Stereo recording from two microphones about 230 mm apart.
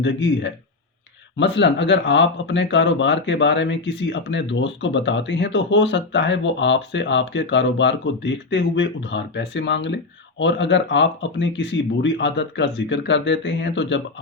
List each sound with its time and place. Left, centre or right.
0.0 s speech: left